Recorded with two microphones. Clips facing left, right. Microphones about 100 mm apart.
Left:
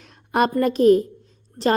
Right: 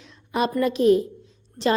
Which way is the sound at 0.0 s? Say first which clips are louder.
Left 4 dB; 55° left (ahead or behind).